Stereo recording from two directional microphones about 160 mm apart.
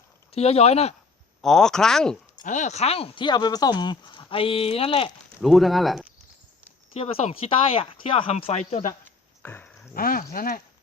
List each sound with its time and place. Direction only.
0.3 s speech: 40° left (ahead or behind)
1.4 s speech: 5° left (ahead or behind)
2.4 s speech: 50° left (ahead or behind)
5.4 s speech: centre (ahead or behind)
6.9 s speech: 40° left (ahead or behind)
9.4 s a sound: 10° left (ahead or behind)
9.9 s speech: 65° left (ahead or behind)